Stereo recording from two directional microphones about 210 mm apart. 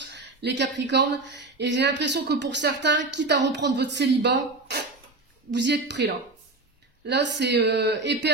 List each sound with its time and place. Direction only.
0.0 s speech: 55° right (ahead or behind)